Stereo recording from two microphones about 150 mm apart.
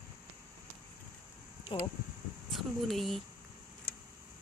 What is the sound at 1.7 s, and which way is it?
Speech, 35° left (ahead or behind).